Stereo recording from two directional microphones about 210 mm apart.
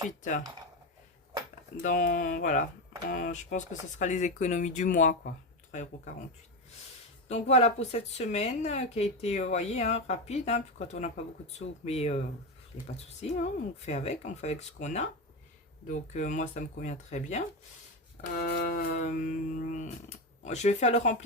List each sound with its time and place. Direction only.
0.2 s a woman's voice: 35° left (ahead or behind)
1.8 s a woman's voice: 40° left (ahead or behind)
7.3 s a woman's voice: 30° left (ahead or behind)
13.2 s a woman's voice: 35° left (ahead or behind)
18.3 s a woman's voice: 45° left (ahead or behind)